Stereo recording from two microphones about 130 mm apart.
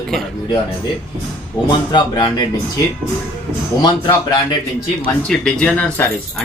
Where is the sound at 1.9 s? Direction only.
35° left (ahead or behind).